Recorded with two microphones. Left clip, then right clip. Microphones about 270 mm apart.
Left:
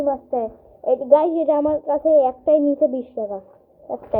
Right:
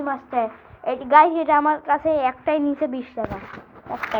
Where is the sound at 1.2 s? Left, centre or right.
Right.